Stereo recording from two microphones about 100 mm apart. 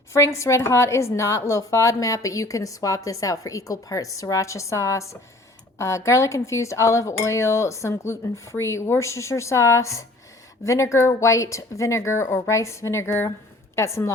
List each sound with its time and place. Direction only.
0.1 s a woman's voice: 30° left (ahead or behind)